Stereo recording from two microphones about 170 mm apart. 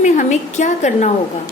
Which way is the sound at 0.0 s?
45° left (ahead or behind).